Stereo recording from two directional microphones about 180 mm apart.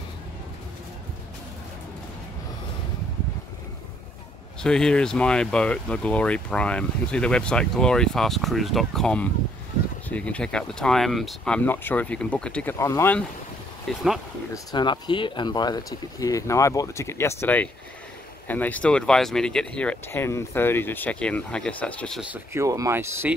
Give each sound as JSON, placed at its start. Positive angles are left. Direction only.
{"t": 4.6, "sound": "speech", "side_deg": 5}
{"t": 13.9, "sound": "speech", "side_deg": 0}
{"t": 14.5, "sound": "speech", "side_deg": 25}
{"t": 22.3, "sound": "speech", "side_deg": -15}